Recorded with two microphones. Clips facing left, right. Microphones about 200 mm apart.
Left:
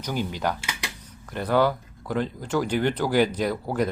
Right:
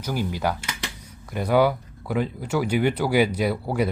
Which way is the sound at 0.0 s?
5° right (ahead or behind).